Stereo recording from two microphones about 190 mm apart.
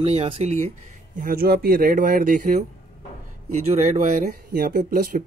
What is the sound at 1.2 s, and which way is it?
Speech, 50° right (ahead or behind).